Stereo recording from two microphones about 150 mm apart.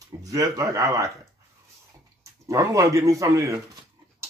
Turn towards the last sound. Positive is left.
turn(degrees=-20)  # may be behind; listen again after turning